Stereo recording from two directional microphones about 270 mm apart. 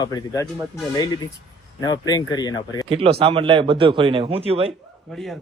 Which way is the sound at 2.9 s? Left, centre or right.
Right.